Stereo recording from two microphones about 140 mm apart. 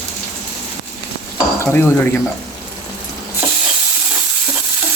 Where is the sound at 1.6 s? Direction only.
15° left (ahead or behind).